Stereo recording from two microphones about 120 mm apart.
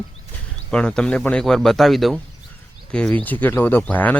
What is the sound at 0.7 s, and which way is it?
Speech, 5° left (ahead or behind).